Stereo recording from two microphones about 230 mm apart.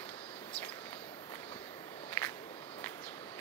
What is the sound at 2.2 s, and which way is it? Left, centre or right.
Walk, centre.